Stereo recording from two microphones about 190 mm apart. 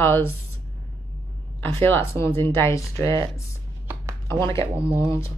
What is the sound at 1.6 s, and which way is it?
Speech, 10° left (ahead or behind).